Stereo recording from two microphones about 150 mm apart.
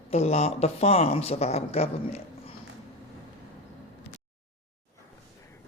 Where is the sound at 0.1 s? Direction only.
45° left (ahead or behind).